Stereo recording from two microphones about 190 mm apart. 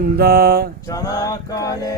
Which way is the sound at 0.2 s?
55° right (ahead or behind).